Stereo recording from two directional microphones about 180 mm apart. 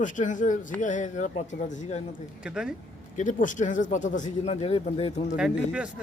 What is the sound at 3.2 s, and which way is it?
Speech, 45° left (ahead or behind).